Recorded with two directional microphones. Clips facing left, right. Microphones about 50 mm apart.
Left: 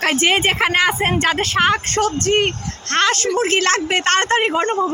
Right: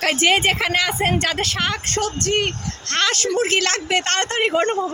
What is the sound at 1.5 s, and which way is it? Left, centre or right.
Speech, left.